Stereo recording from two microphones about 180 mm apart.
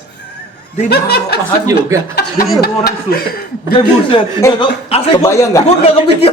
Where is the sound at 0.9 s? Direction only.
65° left (ahead or behind).